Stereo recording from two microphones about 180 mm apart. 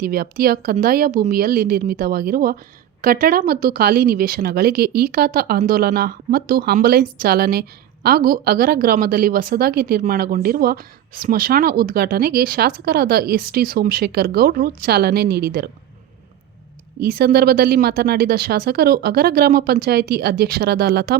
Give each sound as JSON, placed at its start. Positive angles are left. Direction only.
{"t": 0.0, "sound": "a woman's voice", "side_deg": -55}
{"t": 17.0, "sound": "a woman's voice", "side_deg": -55}